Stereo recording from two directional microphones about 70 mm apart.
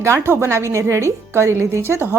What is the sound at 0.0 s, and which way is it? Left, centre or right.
A woman's voice, right.